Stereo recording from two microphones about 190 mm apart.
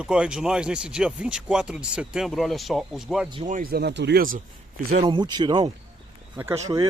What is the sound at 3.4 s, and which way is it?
Speech, 45° right (ahead or behind).